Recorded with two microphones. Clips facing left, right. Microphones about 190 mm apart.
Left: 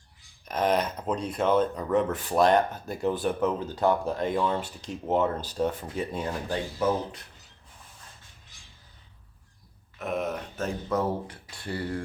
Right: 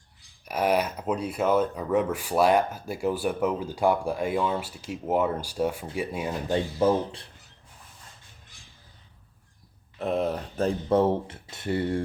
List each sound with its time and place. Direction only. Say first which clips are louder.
0.4 s speech: right 1 dB; 10° right (ahead or behind)
6.5 s speech: right 5 dB; 30° right (ahead or behind)
10.0 s speech: right 4 dB; 30° right (ahead or behind)